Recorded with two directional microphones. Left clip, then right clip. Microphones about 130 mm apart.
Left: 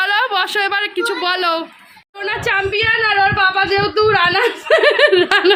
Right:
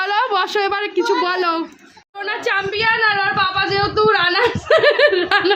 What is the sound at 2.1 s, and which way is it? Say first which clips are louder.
Speech: left 2 dB; 35° left (ahead or behind).